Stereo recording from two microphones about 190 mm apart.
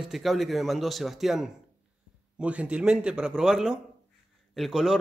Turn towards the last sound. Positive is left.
turn(degrees=0)  # may be behind; listen again after turning